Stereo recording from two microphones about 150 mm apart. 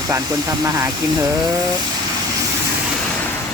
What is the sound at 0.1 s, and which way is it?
Speech, 25° right (ahead or behind).